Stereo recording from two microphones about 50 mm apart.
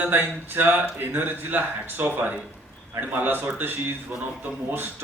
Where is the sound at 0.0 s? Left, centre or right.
Right.